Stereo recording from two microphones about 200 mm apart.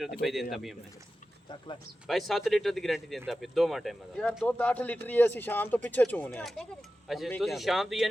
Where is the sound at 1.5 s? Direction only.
25° left (ahead or behind).